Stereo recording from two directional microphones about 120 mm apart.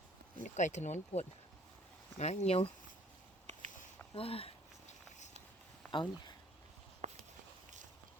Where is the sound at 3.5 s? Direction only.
80° right.